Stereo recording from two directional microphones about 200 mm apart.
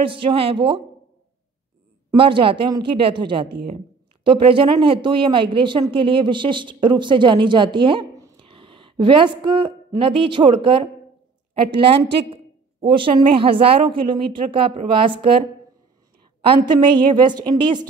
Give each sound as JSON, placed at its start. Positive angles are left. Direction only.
{"t": 0.0, "sound": "a woman's voice", "side_deg": -25}
{"t": 2.0, "sound": "a woman's voice", "side_deg": -25}
{"t": 16.6, "sound": "a woman's voice", "side_deg": -25}